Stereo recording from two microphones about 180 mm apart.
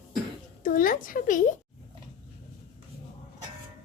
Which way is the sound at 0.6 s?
50° left (ahead or behind).